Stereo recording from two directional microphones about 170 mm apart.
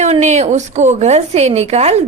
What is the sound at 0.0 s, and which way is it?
A woman's voice, 45° right (ahead or behind).